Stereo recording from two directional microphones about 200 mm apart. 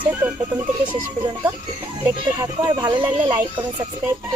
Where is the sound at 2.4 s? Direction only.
20° right (ahead or behind).